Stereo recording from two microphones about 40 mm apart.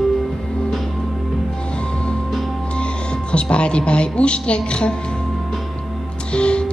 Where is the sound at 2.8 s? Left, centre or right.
Left.